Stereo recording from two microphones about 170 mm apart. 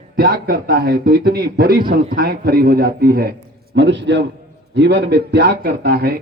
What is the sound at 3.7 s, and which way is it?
A man's voice, 90° right.